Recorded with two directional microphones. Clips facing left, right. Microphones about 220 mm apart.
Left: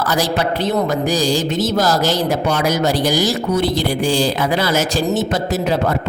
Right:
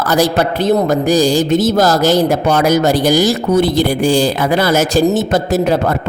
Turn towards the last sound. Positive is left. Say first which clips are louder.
# right 4 dB
turn(degrees=-50)  # may be behind; listen again after turning